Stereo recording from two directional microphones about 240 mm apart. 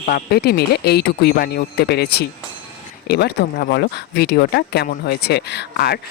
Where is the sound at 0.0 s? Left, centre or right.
Left.